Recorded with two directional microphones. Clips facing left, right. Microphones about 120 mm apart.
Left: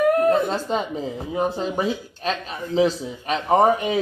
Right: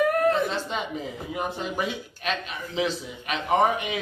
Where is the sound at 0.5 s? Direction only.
40° left (ahead or behind).